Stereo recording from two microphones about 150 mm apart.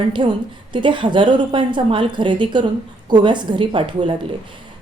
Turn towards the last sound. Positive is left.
turn(degrees=-35)  # may be behind; listen again after turning